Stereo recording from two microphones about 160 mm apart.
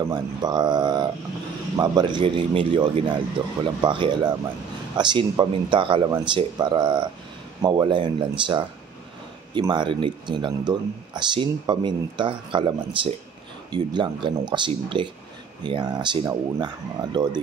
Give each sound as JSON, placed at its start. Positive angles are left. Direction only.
{"t": 0.0, "sound": "a man's voice", "side_deg": -25}